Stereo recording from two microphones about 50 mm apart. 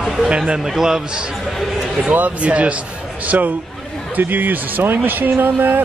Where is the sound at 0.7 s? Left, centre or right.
Centre.